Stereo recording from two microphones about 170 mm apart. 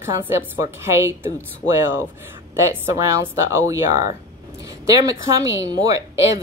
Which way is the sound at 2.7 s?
15° right (ahead or behind).